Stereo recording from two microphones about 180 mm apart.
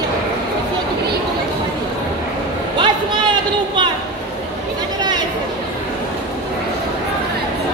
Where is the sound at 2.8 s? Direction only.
25° right (ahead or behind).